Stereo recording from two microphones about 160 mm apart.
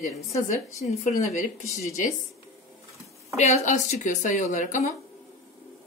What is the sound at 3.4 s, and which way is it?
A woman's voice, 45° left (ahead or behind).